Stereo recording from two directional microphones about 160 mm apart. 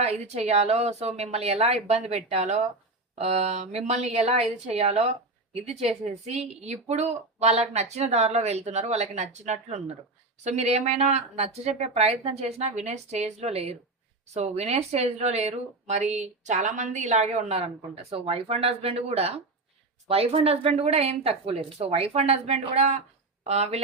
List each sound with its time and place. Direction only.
0.0 s a woman's voice: 40° right (ahead or behind)